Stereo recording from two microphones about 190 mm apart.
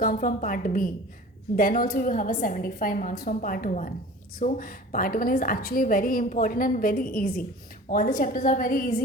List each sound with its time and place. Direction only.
0.0 s a woman's voice: 50° left (ahead or behind)